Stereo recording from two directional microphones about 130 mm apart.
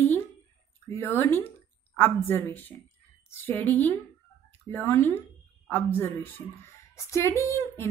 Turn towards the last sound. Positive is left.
turn(degrees=20)  # may be behind; listen again after turning